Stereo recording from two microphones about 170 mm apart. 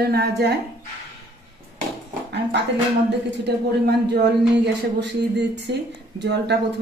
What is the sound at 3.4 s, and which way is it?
Speech, 80° right.